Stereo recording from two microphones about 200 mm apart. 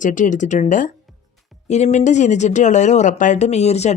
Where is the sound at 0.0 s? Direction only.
40° left (ahead or behind).